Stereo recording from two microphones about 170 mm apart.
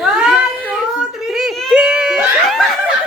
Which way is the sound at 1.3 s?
5° right (ahead or behind).